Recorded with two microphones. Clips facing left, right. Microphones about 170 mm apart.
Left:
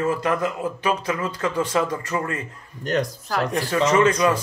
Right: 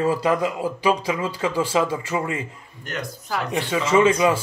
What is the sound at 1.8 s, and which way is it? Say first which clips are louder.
A man's voice: right 1 dB; 10° right (ahead or behind).